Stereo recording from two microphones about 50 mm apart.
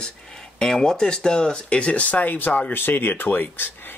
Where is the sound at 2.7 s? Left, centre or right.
Left.